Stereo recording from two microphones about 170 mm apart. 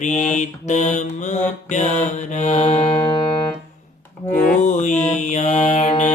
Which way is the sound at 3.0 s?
25° left (ahead or behind).